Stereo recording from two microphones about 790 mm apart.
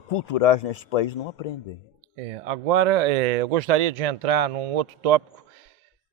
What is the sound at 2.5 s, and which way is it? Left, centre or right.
Speech, right.